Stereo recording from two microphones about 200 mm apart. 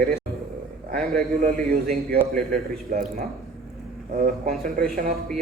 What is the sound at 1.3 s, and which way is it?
Speech, 45° right (ahead or behind).